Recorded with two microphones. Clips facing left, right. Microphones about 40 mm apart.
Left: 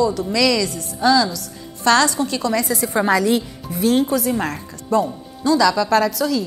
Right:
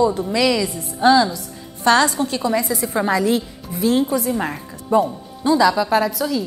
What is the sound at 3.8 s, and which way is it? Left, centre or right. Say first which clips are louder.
Speech: left 1 dB; left.